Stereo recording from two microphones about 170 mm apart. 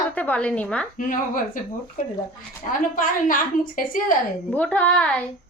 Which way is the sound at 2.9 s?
55° left (ahead or behind).